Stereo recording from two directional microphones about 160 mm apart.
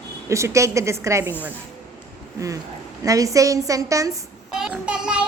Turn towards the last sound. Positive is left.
turn(degrees=-5)  # may be behind; listen again after turning